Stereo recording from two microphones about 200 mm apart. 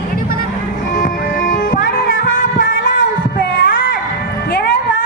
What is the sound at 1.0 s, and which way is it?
Music, 40° left (ahead or behind).